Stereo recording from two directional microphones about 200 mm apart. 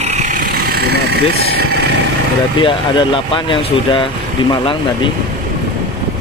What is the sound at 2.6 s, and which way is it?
Speech, 25° left (ahead or behind).